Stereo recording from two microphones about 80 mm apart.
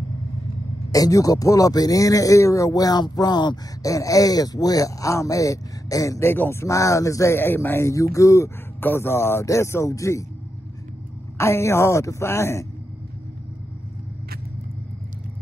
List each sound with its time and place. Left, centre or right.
0.9 s speech: left
6.3 s speech: left
6.6 s speech: left
7.3 s speech: left
8.8 s speech: left
11.3 s speech: left